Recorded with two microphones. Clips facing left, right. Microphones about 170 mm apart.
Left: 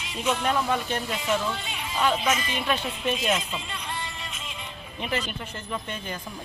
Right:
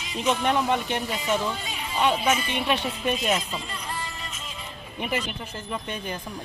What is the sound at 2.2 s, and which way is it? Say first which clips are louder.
Speech: right 2 dB; 10° right (ahead or behind).